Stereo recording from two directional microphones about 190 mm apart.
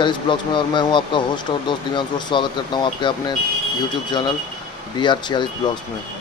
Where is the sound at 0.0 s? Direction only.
25° left (ahead or behind).